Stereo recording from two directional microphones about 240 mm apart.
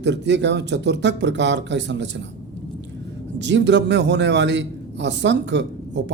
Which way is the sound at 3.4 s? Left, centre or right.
Right.